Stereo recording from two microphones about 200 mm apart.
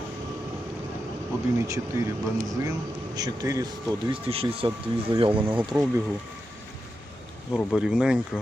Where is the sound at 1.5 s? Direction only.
15° right (ahead or behind).